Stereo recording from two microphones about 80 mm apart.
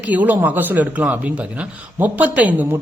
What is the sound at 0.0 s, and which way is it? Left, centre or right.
Speech, centre.